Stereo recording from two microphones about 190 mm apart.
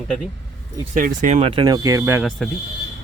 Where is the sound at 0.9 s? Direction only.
45° right (ahead or behind); by 2.2 s 15° right (ahead or behind).